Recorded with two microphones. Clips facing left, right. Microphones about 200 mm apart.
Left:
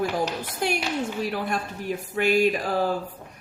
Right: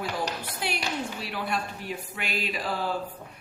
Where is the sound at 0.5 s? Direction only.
45° left (ahead or behind).